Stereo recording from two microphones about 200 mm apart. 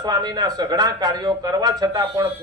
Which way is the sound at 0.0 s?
20° right (ahead or behind).